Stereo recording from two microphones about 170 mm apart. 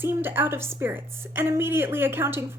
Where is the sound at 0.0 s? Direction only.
15° right (ahead or behind).